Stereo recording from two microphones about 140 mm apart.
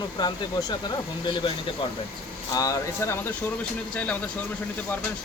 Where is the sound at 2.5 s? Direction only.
25° left (ahead or behind).